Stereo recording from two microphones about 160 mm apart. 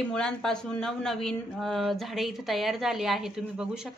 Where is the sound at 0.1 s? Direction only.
5° left (ahead or behind).